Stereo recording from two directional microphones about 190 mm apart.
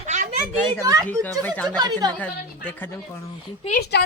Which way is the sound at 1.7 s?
20° right (ahead or behind).